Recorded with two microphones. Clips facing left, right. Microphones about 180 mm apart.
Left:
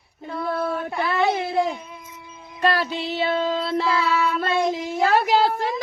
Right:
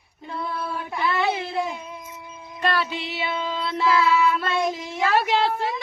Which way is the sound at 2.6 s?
40° left (ahead or behind).